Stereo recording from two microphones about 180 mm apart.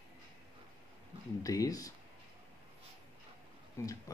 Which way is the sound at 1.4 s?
20° left (ahead or behind).